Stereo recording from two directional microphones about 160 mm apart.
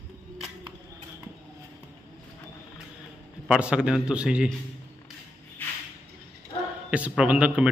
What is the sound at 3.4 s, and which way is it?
A man's voice, 5° right (ahead or behind).